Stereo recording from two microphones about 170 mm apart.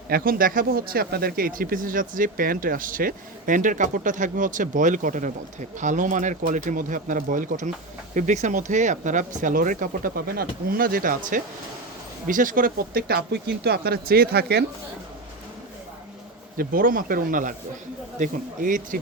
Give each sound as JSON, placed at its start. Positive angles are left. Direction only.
{"t": 0.1, "sound": "speech", "side_deg": -60}
{"t": 16.6, "sound": "speech", "side_deg": -55}